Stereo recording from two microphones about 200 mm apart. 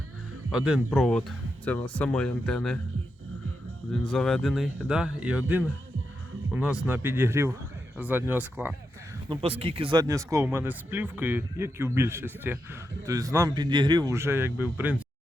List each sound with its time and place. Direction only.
0.5 s speech: centre (ahead or behind)
4.0 s speech: 5° left (ahead or behind)
6.5 s speech: 5° right (ahead or behind)
9.3 s speech: 30° right (ahead or behind); by 15.0 s 10° right (ahead or behind)